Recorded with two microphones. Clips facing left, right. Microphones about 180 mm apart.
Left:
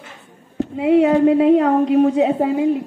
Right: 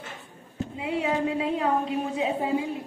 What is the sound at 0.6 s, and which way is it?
A woman's voice, 65° left (ahead or behind).